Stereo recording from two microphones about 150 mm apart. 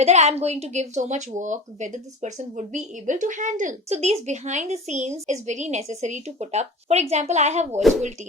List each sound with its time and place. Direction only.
0.0 s speech: 45° right (ahead or behind)